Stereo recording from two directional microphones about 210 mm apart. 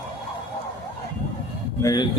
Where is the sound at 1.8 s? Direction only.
20° left (ahead or behind).